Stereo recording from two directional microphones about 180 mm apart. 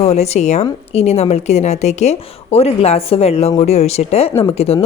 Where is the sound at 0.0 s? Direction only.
35° left (ahead or behind).